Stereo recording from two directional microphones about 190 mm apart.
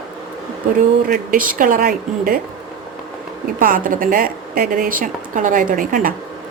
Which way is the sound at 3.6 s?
45° right (ahead or behind).